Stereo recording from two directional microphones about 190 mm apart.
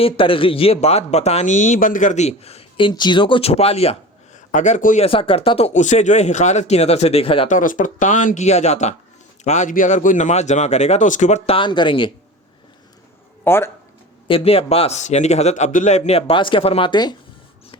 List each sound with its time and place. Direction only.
0.0 s speech: 30° left (ahead or behind)
5.0 s speech: 30° left (ahead or behind)
7.4 s speech: 45° left (ahead or behind); by 12.1 s 25° left (ahead or behind)
13.4 s speech: 10° left (ahead or behind)
14.3 s speech: 30° left (ahead or behind)